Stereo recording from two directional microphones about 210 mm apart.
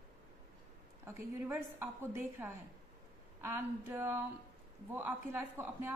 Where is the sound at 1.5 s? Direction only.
10° right (ahead or behind).